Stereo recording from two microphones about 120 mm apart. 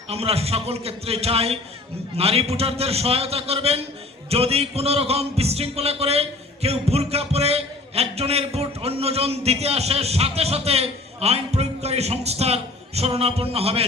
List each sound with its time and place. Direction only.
0.1 s music: 55° right (ahead or behind)